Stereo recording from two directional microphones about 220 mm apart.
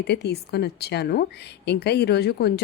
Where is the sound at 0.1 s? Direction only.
50° left (ahead or behind).